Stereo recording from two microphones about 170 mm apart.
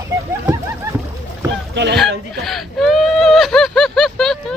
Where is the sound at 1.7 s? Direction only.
80° right.